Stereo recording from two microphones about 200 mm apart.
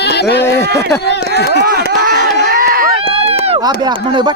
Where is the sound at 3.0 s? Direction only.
30° right (ahead or behind).